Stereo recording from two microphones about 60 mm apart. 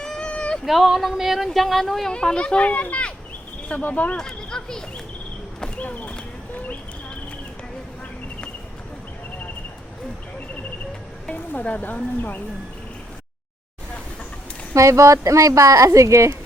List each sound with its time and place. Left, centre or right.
0.0 s a sound: centre
0.6 s speech: centre
2.1 s speech: centre
4.2 s speech: centre
5.5 s clip-clop: centre
5.8 s clip-clop: left
11.3 s music: left
14.7 s speech: right